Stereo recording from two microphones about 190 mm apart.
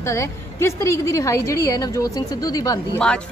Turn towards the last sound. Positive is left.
turn(degrees=5)  # may be behind; listen again after turning